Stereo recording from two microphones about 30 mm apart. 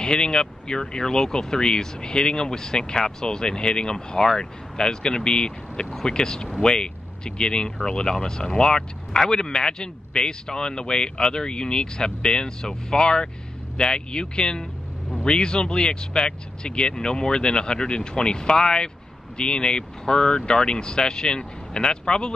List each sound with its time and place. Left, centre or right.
0.0 s speech: left